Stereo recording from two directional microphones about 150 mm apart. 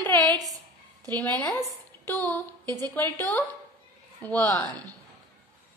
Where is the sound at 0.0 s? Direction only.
15° left (ahead or behind).